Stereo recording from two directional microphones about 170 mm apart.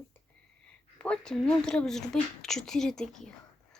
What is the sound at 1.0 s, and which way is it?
Speech, 5° left (ahead or behind).